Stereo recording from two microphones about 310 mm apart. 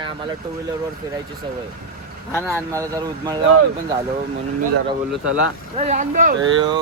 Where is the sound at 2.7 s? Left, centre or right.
Centre.